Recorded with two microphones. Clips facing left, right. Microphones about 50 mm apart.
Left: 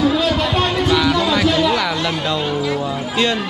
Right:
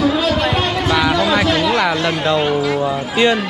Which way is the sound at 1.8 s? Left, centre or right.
Right.